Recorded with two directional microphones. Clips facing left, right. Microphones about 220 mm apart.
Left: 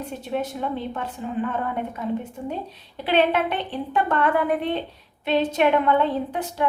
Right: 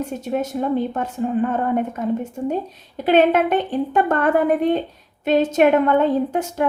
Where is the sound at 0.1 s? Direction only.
45° right (ahead or behind).